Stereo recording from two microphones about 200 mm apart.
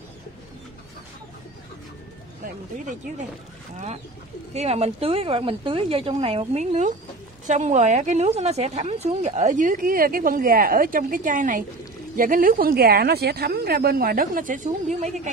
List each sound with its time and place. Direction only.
2.4 s a woman's voice: 40° right (ahead or behind)
4.6 s a woman's voice: 30° right (ahead or behind)